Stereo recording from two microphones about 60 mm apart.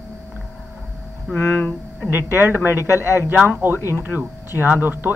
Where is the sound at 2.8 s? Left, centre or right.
Left.